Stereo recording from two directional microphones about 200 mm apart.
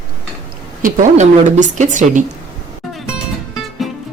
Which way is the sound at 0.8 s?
40° right (ahead or behind).